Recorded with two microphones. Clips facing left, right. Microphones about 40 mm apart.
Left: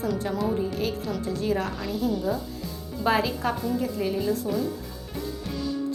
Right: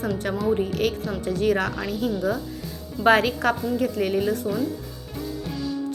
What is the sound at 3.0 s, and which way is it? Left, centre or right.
A woman's voice, right.